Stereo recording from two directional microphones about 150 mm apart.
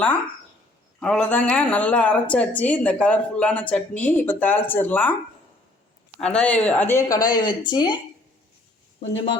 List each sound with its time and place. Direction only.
0.9 s speech: 5° left (ahead or behind)
6.1 s speech: 5° left (ahead or behind); by 7.9 s 30° left (ahead or behind)